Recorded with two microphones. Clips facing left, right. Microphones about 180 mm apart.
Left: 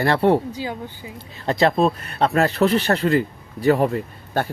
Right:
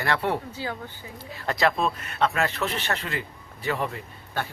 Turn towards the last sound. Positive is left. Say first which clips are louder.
# left 9 dB
turn(degrees=45)  # may be behind; listen again after turning